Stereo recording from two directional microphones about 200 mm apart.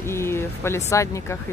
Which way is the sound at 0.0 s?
15° left (ahead or behind).